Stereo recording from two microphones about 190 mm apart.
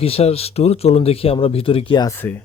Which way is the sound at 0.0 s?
30° left (ahead or behind).